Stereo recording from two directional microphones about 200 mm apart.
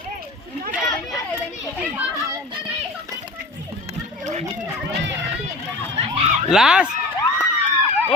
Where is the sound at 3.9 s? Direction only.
35° right (ahead or behind).